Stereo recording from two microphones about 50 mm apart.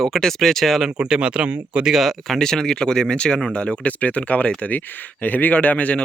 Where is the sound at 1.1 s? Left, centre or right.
Centre.